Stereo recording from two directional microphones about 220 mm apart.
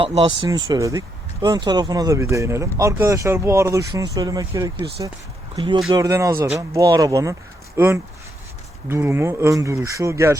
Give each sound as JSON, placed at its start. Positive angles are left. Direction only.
{"t": 0.0, "sound": "speech", "side_deg": -25}
{"t": 8.9, "sound": "speech", "side_deg": -10}